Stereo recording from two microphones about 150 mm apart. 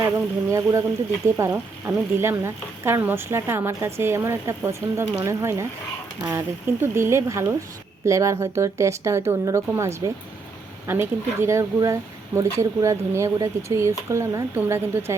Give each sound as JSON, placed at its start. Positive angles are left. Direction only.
{"t": 0.5, "sound": "speech", "side_deg": -20}